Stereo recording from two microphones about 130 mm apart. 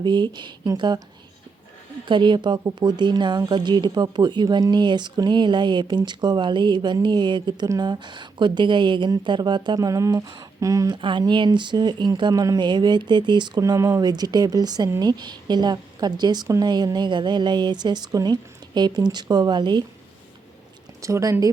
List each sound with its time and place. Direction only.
0.0 s a woman's voice: 35° right (ahead or behind)
2.0 s a woman's voice: 40° right (ahead or behind)
10.9 s a woman's voice: 40° right (ahead or behind)
21.0 s speech: 25° right (ahead or behind)